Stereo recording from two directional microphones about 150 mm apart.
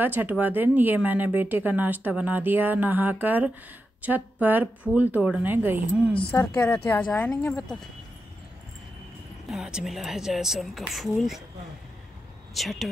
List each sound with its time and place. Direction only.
0.0 s speech: 10° right (ahead or behind)
6.6 s a woman's voice: 10° left (ahead or behind)
7.4 s speech: 20° left (ahead or behind)
9.5 s speech: 5° right (ahead or behind)
12.5 s speech: centre (ahead or behind)